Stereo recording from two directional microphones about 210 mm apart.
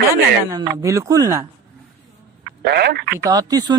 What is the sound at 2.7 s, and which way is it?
Speech, 50° right (ahead or behind).